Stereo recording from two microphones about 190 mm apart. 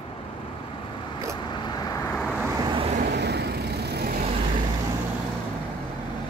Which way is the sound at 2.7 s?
30° right (ahead or behind).